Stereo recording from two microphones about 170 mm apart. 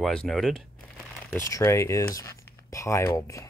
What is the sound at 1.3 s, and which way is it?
Speech, 20° left (ahead or behind).